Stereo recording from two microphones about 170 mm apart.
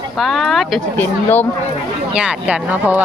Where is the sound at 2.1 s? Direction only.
5° right (ahead or behind).